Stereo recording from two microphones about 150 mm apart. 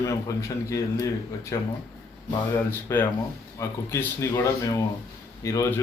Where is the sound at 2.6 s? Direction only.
15° left (ahead or behind).